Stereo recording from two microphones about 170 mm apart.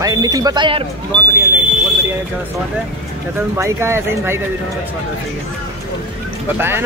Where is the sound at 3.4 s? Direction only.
15° right (ahead or behind).